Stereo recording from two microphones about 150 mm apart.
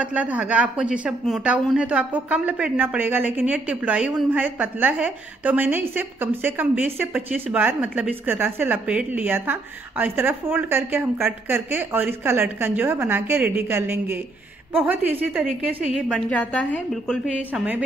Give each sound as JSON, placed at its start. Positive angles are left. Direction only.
{"t": 0.0, "sound": "a woman's voice", "side_deg": -10}